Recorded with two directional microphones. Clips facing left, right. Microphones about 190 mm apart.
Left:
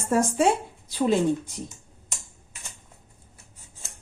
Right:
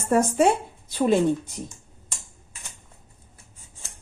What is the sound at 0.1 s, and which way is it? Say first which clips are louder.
Speech: right 2 dB; 60° right (ahead or behind).